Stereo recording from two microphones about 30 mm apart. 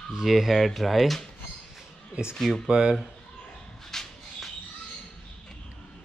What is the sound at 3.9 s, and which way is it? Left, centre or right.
Shuffle, centre.